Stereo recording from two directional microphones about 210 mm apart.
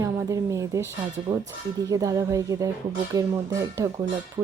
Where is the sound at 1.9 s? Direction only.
15° right (ahead or behind).